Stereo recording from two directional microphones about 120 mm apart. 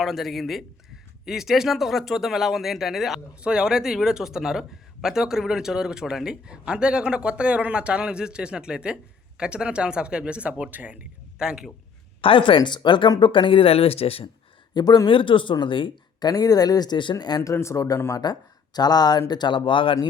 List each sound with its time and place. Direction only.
0.0 s speech: centre (ahead or behind)
12.2 s speech: 45° left (ahead or behind)
14.7 s speech: 35° left (ahead or behind)
16.3 s speech: 30° left (ahead or behind)
17.5 s speech: 25° left (ahead or behind); by 20.0 s 45° left (ahead or behind)